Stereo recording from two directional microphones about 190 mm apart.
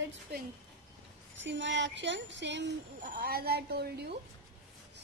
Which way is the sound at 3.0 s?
50° right (ahead or behind).